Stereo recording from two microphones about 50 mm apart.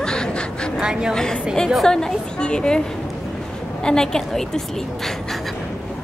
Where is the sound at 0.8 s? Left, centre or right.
Centre.